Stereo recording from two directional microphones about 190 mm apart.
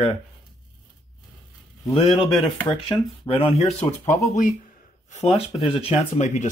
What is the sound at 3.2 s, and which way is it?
Speech, 30° left (ahead or behind).